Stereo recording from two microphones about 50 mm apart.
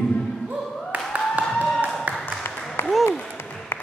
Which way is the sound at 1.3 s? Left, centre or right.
Right.